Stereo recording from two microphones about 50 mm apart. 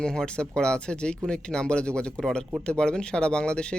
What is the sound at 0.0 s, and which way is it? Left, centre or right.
Speech, centre.